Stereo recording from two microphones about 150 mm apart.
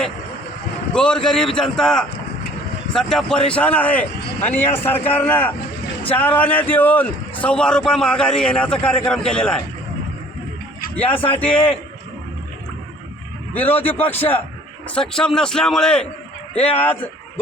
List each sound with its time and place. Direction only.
0.9 s a man's voice: 5° left (ahead or behind)
11.1 s a man's voice: 35° left (ahead or behind)
11.3 s speech: 10° left (ahead or behind)
13.5 s a man's voice: 10° left (ahead or behind)